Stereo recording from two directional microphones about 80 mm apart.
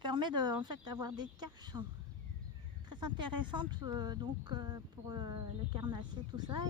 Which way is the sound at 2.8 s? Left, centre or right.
Right.